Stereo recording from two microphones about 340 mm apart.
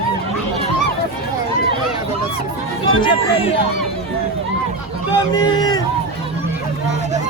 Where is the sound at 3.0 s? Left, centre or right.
Centre.